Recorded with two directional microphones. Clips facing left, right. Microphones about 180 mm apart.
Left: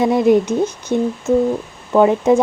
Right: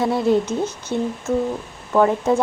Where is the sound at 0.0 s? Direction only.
15° left (ahead or behind).